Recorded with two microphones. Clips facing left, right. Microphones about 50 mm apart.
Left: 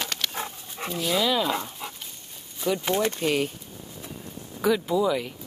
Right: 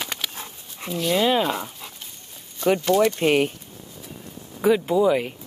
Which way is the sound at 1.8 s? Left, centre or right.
Centre.